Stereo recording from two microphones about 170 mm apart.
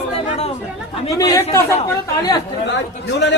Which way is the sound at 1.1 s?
20° left (ahead or behind).